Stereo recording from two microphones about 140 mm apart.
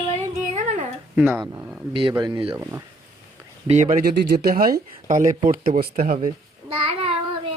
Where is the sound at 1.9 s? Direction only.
40° right (ahead or behind).